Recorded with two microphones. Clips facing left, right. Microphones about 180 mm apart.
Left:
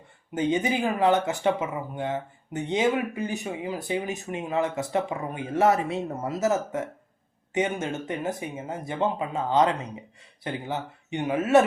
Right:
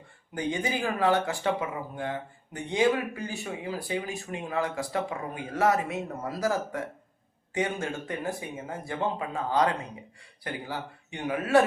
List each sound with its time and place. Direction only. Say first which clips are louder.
0.3 s speech: left 5 dB; 20° left (ahead or behind)